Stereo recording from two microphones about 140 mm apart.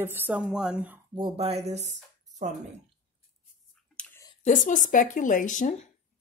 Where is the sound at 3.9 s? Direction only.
10° left (ahead or behind).